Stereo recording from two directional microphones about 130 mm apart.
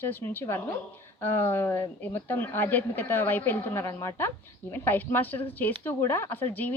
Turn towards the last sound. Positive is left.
turn(degrees=15)  # may be behind; listen again after turning